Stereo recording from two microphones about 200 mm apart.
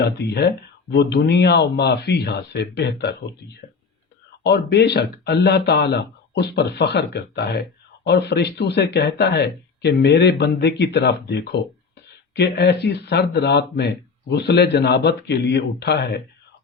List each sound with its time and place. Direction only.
0.0 s speech: 55° left (ahead or behind)
4.4 s speech: 60° left (ahead or behind)